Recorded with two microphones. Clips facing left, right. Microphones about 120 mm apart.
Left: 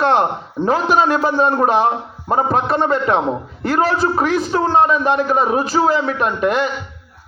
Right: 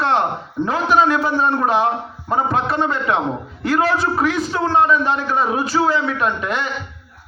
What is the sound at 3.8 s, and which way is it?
A man's voice, 35° left (ahead or behind).